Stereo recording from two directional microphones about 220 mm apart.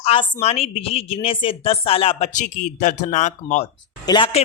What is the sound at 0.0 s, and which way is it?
A woman's voice, 25° left (ahead or behind).